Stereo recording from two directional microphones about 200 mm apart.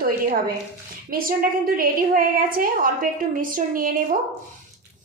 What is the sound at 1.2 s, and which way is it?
A woman's voice, 45° right (ahead or behind).